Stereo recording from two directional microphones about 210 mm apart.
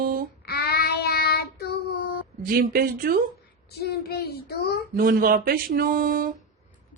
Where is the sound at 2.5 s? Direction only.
45° right (ahead or behind).